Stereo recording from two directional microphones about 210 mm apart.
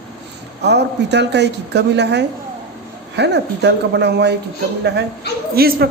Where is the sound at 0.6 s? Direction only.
55° right (ahead or behind).